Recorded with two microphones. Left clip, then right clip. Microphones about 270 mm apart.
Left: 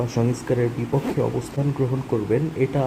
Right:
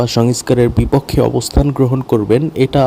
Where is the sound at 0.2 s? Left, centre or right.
Right.